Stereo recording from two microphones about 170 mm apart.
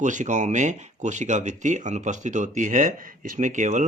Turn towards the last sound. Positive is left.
turn(degrees=-45)  # may be behind; listen again after turning